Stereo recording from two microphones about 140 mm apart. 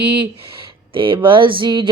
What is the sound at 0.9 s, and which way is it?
Speech, 40° right (ahead or behind).